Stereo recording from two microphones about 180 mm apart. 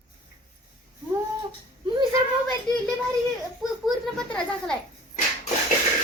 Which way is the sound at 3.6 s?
Centre (ahead or behind).